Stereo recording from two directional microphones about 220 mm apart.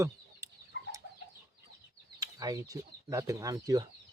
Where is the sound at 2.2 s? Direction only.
15° right (ahead or behind).